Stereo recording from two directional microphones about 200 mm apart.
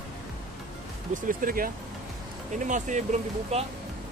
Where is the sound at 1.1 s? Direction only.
45° right (ahead or behind).